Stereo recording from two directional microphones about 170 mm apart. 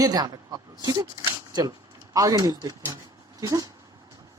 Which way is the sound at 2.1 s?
20° right (ahead or behind).